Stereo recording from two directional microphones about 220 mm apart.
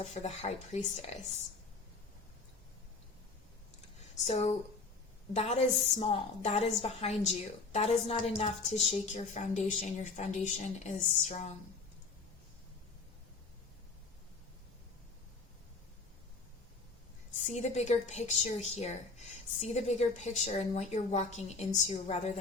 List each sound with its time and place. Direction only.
0.0 s a woman's voice: 30° left (ahead or behind)
4.3 s a woman's voice: 30° left (ahead or behind)
17.5 s a woman's voice: 30° left (ahead or behind)